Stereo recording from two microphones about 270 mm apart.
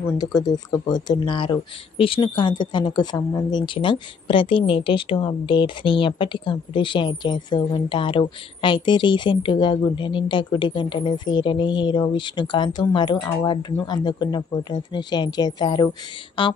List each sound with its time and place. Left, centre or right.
0.2 s speech: centre